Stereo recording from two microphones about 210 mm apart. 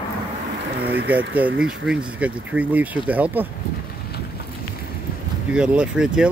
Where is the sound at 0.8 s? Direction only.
50° right (ahead or behind).